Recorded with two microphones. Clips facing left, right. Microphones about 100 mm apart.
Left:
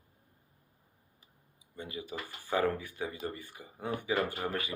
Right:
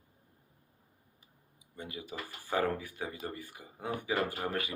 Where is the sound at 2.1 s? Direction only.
45° right (ahead or behind).